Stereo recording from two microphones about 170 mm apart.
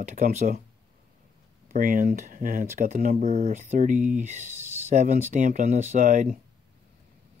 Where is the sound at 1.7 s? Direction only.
55° right (ahead or behind).